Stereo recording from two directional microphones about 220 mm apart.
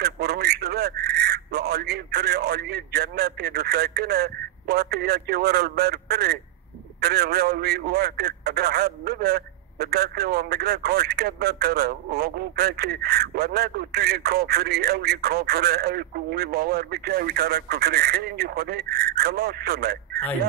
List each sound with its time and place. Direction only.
0.0 s a man's voice: 45° right (ahead or behind)